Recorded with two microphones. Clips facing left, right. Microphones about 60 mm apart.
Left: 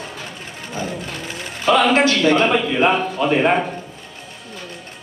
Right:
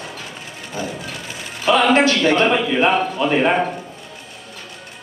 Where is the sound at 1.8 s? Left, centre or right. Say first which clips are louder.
Even; centre.